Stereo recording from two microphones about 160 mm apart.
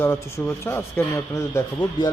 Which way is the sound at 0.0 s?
15° left (ahead or behind).